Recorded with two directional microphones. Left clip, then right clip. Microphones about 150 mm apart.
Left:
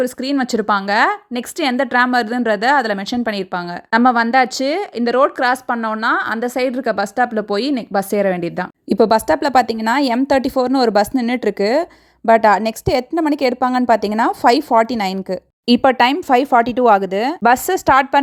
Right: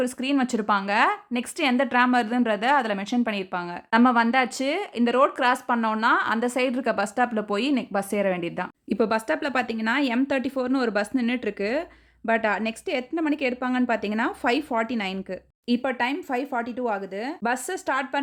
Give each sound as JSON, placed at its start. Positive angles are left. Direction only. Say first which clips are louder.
{"t": 0.0, "sound": "a woman's voice", "louder": "left 6 dB", "side_deg": 35}
{"t": 15.6, "sound": "speech", "louder": "left 13 dB", "side_deg": 65}